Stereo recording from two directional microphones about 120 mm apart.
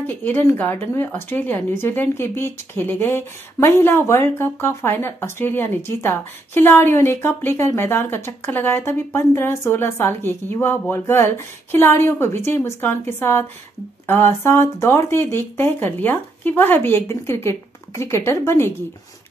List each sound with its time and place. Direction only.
0.0 s a woman's voice: 15° left (ahead or behind)